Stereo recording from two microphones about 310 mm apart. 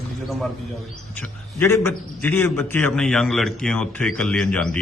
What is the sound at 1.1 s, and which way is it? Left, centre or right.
A man's voice, centre.